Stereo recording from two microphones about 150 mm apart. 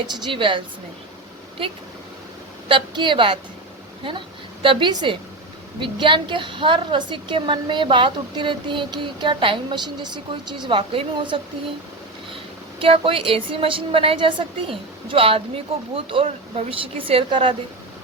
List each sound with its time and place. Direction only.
0.3 s a woman's voice: 35° right (ahead or behind)
2.6 s a woman's voice: 30° right (ahead or behind)
4.6 s a woman's voice: 35° right (ahead or behind)
12.8 s a woman's voice: 35° right (ahead or behind)